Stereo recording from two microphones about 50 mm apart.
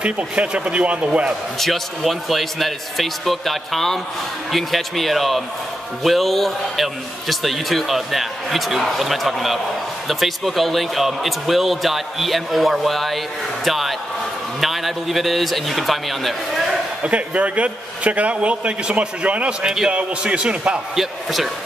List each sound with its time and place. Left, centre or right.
0.0 s a man's voice: right
1.6 s a man's voice: centre
17.0 s a man's voice: right
19.6 s a man's voice: centre
19.9 s a man's voice: right
20.9 s a man's voice: centre